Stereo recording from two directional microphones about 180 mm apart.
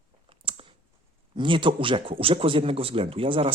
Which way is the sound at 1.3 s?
25° right (ahead or behind).